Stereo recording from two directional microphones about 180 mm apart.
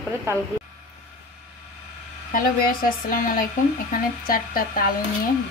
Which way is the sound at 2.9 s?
50° left (ahead or behind).